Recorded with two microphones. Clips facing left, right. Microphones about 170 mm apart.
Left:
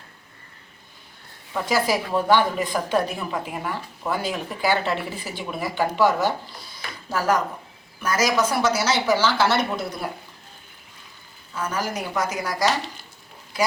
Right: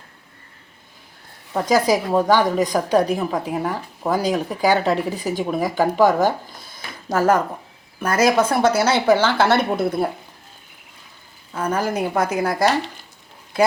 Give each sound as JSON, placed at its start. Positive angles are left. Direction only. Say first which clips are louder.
{"t": 1.5, "sound": "a woman's voice", "louder": "right 5 dB", "side_deg": -40}
{"t": 11.5, "sound": "speech", "louder": "right 5 dB", "side_deg": -55}